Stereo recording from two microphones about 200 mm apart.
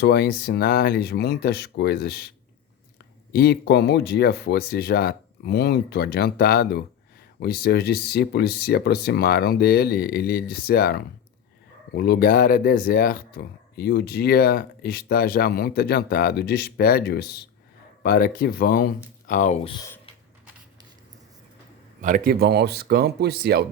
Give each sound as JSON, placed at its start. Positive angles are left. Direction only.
{"t": 0.0, "sound": "speech", "side_deg": 55}
{"t": 3.3, "sound": "speech", "side_deg": 55}
{"t": 22.0, "sound": "speech", "side_deg": -45}